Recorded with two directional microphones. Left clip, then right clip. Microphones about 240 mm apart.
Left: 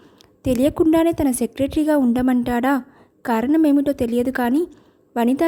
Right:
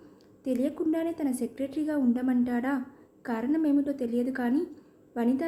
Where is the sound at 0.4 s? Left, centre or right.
Left.